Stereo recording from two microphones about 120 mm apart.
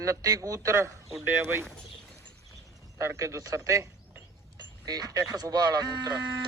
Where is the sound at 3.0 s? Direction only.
25° right (ahead or behind).